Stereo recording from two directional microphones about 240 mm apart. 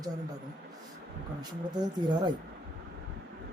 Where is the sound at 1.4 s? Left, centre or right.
Centre.